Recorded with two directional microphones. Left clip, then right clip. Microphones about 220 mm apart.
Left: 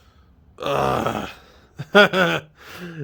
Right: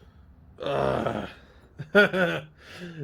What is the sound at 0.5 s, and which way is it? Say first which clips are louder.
Groan: left 5 dB; 30° left (ahead or behind).